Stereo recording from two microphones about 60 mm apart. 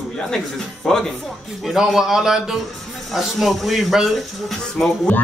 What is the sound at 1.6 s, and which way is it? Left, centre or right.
A man's voice, centre.